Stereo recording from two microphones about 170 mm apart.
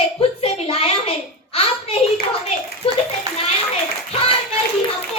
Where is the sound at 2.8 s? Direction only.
30° left (ahead or behind).